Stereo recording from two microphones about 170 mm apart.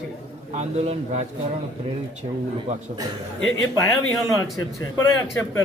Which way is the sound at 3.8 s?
20° left (ahead or behind).